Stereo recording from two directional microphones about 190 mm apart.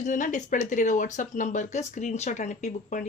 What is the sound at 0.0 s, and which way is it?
Speech, 40° left (ahead or behind).